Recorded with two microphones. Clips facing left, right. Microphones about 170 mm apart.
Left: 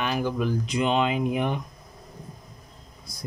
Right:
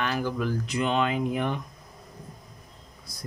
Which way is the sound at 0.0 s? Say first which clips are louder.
Left 2 dB; 15° left (ahead or behind).